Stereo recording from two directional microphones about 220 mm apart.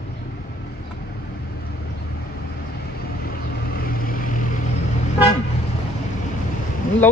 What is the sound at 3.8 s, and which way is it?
Vehicle, 40° left (ahead or behind).